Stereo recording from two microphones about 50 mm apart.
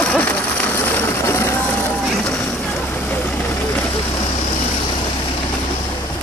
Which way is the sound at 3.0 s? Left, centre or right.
Left.